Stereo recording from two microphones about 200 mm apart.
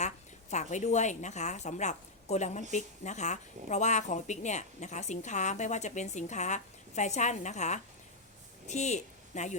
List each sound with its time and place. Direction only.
0.5 s a woman's voice: 35° left (ahead or behind)